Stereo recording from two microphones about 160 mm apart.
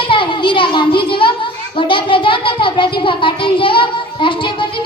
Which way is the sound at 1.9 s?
30° left (ahead or behind).